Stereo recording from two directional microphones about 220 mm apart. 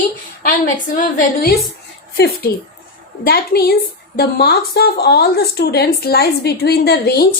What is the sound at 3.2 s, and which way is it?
Speech, 45° left (ahead or behind).